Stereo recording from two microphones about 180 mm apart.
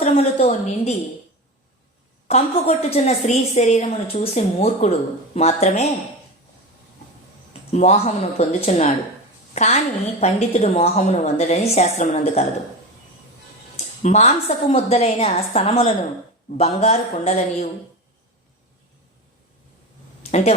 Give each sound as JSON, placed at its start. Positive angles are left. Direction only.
{"t": 0.0, "sound": "a sound", "side_deg": 35}
{"t": 2.2, "sound": "a woman's voice", "side_deg": 35}
{"t": 7.7, "sound": "a woman's voice", "side_deg": 40}
{"t": 14.0, "sound": "a woman's voice", "side_deg": 40}
{"t": 20.3, "sound": "a woman's voice", "side_deg": 35}